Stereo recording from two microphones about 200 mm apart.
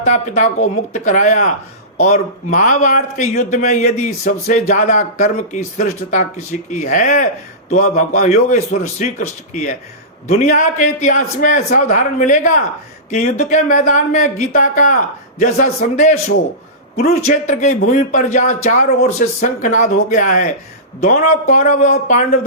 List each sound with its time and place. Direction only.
0.0 s speech: 35° left (ahead or behind)